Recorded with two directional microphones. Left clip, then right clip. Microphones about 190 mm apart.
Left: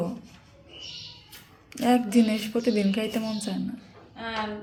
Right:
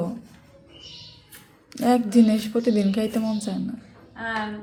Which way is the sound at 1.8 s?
25° right (ahead or behind).